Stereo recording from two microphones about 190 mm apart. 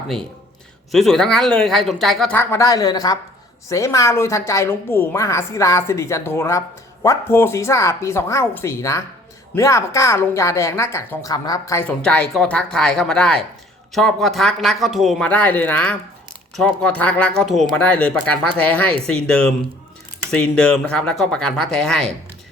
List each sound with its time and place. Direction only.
0.9 s a woman's voice: centre (ahead or behind)
12.0 s a woman's voice: 5° left (ahead or behind)